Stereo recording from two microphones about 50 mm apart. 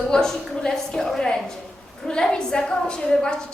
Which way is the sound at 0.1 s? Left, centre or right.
Centre.